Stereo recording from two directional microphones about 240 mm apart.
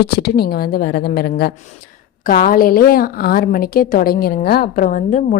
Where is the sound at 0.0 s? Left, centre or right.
Left.